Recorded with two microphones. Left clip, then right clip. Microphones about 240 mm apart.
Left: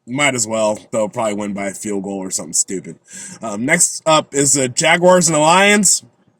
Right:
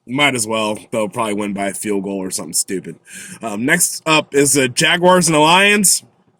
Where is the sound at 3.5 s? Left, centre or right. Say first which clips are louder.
Even; centre.